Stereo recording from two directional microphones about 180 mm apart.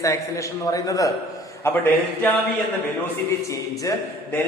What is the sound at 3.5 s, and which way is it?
Speech, 20° left (ahead or behind).